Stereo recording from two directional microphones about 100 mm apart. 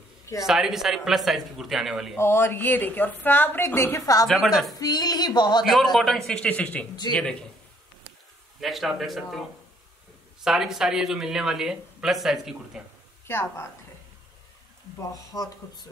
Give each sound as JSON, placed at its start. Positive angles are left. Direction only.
{"t": 0.4, "sound": "speech", "side_deg": -5}
{"t": 2.1, "sound": "a woman's voice", "side_deg": 25}
{"t": 4.7, "sound": "a sound", "side_deg": 40}
{"t": 5.6, "sound": "a man's voice", "side_deg": 0}
{"t": 8.5, "sound": "speech", "side_deg": 0}
{"t": 10.4, "sound": "speech", "side_deg": -5}
{"t": 13.3, "sound": "a woman's voice", "side_deg": 25}
{"t": 15.0, "sound": "a sound", "side_deg": 40}